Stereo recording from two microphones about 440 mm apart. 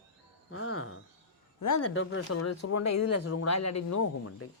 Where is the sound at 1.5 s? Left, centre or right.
Left.